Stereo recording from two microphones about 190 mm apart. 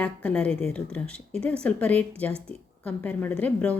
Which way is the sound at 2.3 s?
30° right (ahead or behind).